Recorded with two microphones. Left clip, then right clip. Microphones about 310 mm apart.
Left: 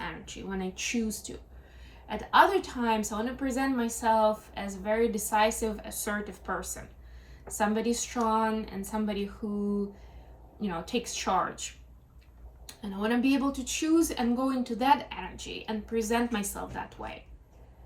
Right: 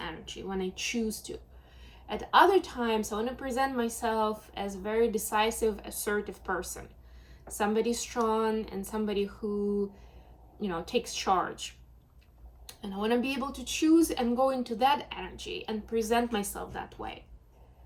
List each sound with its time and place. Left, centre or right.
0.0 s a woman's voice: centre